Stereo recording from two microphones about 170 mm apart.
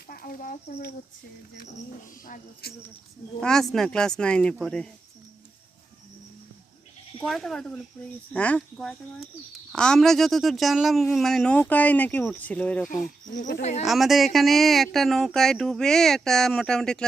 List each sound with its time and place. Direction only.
0.1 s a sound: 60° left (ahead or behind)
2.2 s speech: 60° left (ahead or behind)
3.4 s speech: 5° left (ahead or behind)
7.2 s speech: centre (ahead or behind)
13.6 s speech: 40° left (ahead or behind)
13.8 s speech: centre (ahead or behind)